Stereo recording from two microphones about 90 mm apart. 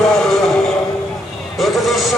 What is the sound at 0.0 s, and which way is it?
Music, 5° left (ahead or behind).